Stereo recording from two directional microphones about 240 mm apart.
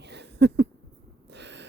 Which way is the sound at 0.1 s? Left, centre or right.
Right.